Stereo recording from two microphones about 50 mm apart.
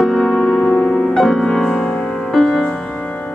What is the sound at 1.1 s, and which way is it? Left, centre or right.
Music, centre.